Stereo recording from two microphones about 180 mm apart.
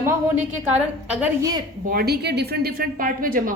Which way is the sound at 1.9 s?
60° right (ahead or behind).